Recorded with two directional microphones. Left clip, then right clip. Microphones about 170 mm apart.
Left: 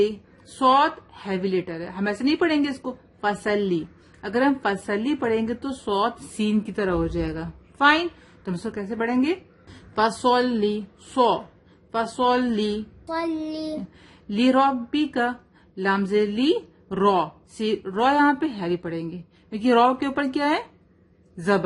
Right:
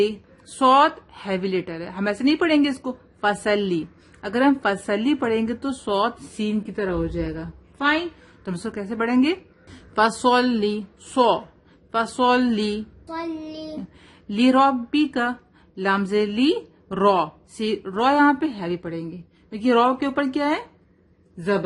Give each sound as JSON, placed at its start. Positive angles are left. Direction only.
{"t": 0.0, "sound": "speech", "side_deg": -15}
{"t": 6.3, "sound": "a woman's voice", "side_deg": 0}
{"t": 8.4, "sound": "speech", "side_deg": -10}
{"t": 13.1, "sound": "child singing", "side_deg": 55}
{"t": 14.3, "sound": "speech", "side_deg": -10}